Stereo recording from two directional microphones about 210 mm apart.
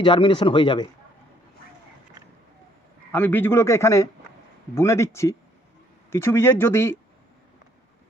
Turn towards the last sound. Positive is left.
turn(degrees=10)  # may be behind; listen again after turning